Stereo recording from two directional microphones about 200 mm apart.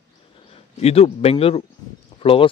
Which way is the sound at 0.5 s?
30° left (ahead or behind).